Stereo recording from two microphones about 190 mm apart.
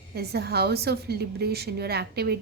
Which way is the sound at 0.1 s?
55° right (ahead or behind).